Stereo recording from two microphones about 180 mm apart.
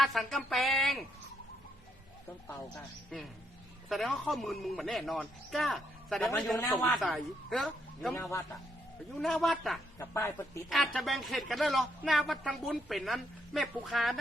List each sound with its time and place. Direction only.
0.0 s speech: centre (ahead or behind)
3.8 s speech: centre (ahead or behind)
8.1 s a man's voice: 15° left (ahead or behind)
9.1 s speech: centre (ahead or behind)
10.0 s a man's voice: 15° left (ahead or behind)
10.7 s speech: centre (ahead or behind)